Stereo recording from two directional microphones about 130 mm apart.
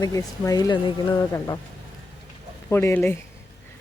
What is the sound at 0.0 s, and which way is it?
Speech, 25° left (ahead or behind).